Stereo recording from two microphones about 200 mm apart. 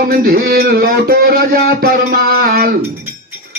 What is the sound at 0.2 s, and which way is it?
Speech, 50° right (ahead or behind).